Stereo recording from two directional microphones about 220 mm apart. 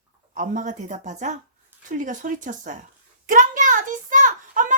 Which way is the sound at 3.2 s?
35° right (ahead or behind).